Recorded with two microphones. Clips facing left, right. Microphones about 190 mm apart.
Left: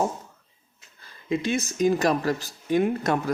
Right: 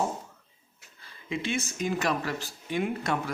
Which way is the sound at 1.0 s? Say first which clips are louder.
Left 6 dB; 40° left (ahead or behind).